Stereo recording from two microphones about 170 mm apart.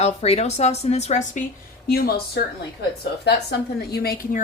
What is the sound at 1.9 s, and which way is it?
A woman's voice, 65° left (ahead or behind).